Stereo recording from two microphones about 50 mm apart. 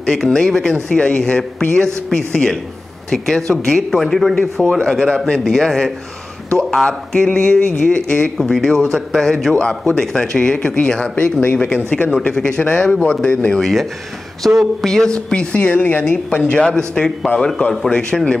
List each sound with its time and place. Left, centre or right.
0.0 s a man's voice: centre
0.9 s speech: left
2.0 s a man's voice: centre
3.9 s a man's voice: centre
5.4 s a man's voice: centre; by 8.2 s left
8.4 s a man's voice: centre
11.9 s speech: left
13.6 s speech: centre
14.5 s a sound: centre
14.9 s speech: centre
16.5 s a man's voice: centre